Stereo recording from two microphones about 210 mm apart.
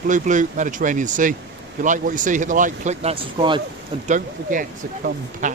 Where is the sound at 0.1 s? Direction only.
35° right (ahead or behind).